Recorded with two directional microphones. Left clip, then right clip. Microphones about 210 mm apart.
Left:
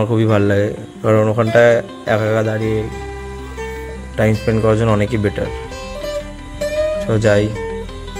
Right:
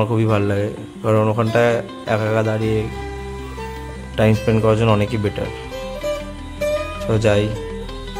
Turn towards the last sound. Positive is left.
turn(degrees=5)  # may be behind; listen again after turning